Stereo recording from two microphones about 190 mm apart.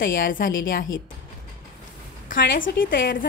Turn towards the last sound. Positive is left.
turn(degrees=50)  # may be behind; listen again after turning